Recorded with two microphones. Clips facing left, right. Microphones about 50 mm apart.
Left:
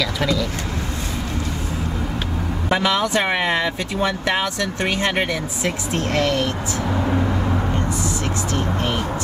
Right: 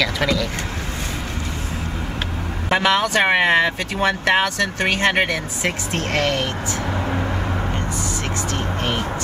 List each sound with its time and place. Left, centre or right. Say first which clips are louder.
0.0 s speech: right 1 dB; right
2.7 s speech: right 2 dB; right
6.9 s vehicle: left 4 dB; centre
8.5 s vehicle: left 1 dB; right